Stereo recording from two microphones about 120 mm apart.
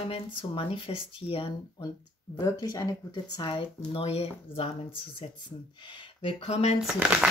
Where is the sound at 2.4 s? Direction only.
30° left (ahead or behind); by 4.6 s 55° left (ahead or behind).